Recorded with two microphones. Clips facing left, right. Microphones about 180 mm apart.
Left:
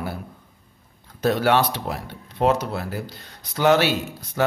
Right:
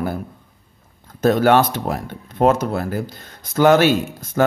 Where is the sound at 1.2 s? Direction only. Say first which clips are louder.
Right 5 dB; 50° right (ahead or behind).